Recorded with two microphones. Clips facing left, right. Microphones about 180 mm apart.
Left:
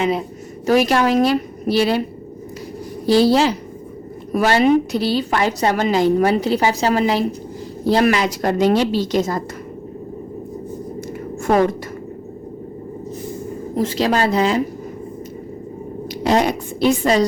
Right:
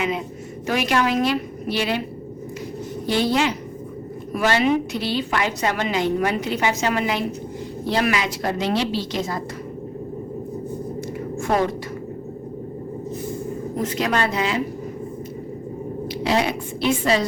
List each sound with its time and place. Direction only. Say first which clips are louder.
0.7 s a woman's voice: left 6 dB; 40° left (ahead or behind)
3.1 s a woman's voice: left 7 dB; 35° left (ahead or behind)
13.7 s a woman's voice: left 5 dB; 30° left (ahead or behind)
16.2 s a woman's voice: left 5 dB; 45° left (ahead or behind)